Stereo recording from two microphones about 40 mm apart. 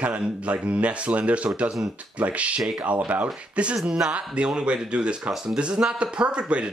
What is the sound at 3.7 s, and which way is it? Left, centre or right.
Speech, centre.